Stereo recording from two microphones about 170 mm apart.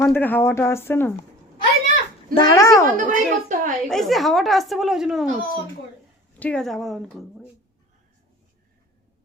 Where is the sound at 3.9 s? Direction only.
Centre (ahead or behind).